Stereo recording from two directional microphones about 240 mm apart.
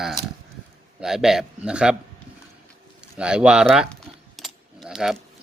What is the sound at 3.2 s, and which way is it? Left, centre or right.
Keys jangling, centre.